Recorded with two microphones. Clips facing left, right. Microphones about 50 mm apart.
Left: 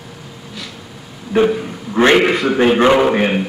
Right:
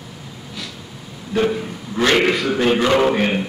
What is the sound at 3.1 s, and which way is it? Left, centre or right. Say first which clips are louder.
Speech: left 3 dB; centre.